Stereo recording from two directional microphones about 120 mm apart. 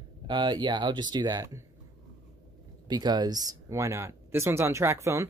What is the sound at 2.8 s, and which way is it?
Speech, 35° right (ahead or behind).